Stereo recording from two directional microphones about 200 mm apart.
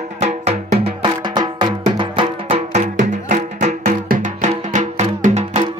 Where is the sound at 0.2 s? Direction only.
30° right (ahead or behind).